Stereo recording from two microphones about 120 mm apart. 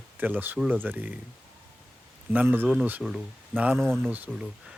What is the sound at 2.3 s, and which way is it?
Speech, 15° right (ahead or behind).